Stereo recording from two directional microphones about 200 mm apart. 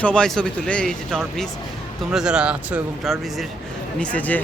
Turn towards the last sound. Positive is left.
turn(degrees=5)  # may be behind; listen again after turning